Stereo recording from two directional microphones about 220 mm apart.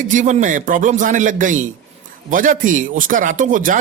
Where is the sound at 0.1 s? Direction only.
35° right (ahead or behind).